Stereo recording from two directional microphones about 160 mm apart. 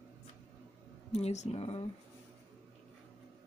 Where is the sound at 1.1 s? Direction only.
45° left (ahead or behind).